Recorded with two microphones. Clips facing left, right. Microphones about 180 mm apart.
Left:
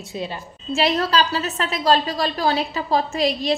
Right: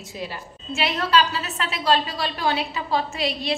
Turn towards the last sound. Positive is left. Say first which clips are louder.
# left 5 dB
turn(degrees=40)  # may be behind; listen again after turning